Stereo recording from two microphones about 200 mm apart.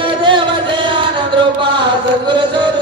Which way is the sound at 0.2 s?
25° right (ahead or behind).